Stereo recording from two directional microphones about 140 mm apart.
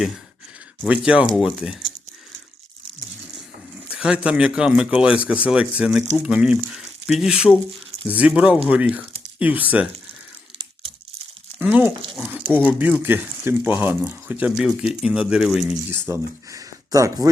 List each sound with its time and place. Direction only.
0.8 s speech: 5° right (ahead or behind)
3.8 s speech: 5° right (ahead or behind)
11.6 s speech: 10° right (ahead or behind)
15.9 s speech: 15° right (ahead or behind)